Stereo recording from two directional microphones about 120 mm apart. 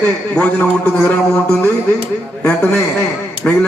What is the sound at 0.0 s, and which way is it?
A man's voice, 15° left (ahead or behind).